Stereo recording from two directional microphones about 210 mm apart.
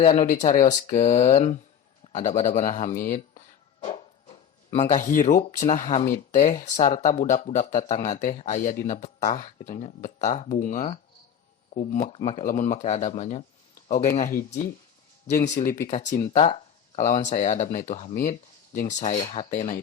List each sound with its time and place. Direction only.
0.0 s speech: 30° left (ahead or behind)
3.8 s speech: 30° left (ahead or behind)